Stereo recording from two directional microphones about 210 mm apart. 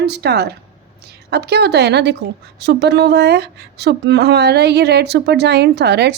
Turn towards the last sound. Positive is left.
turn(degrees=-50)  # may be behind; listen again after turning